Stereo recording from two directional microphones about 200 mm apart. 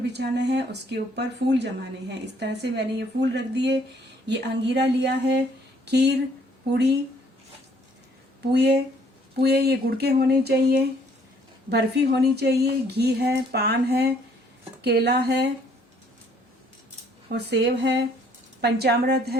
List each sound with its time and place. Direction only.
0.0 s speech: 60° right (ahead or behind)
8.5 s speech: 55° right (ahead or behind)
17.2 s speech: 55° right (ahead or behind)